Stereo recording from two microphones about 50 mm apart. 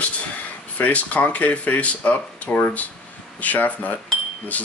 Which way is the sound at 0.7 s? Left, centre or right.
Left.